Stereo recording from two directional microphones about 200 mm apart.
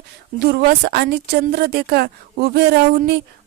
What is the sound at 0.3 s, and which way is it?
Speech, 50° right (ahead or behind).